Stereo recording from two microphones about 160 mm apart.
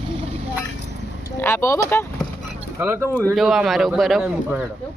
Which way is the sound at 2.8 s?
15° right (ahead or behind).